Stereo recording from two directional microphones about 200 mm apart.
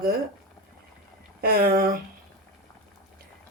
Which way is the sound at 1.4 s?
45° right (ahead or behind).